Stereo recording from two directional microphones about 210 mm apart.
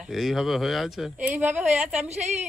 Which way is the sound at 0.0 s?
Centre (ahead or behind).